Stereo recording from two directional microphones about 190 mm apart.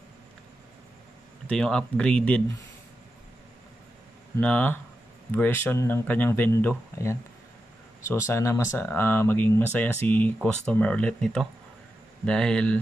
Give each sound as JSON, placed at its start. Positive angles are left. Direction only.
{"t": 1.5, "sound": "speech", "side_deg": 5}
{"t": 4.4, "sound": "speech", "side_deg": 10}